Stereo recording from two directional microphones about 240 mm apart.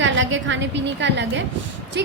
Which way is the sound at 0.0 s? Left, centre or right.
Right.